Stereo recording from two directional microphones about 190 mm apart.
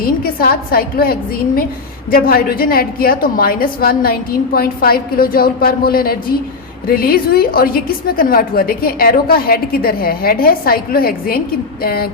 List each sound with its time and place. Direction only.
0.0 s a woman's voice: 50° left (ahead or behind)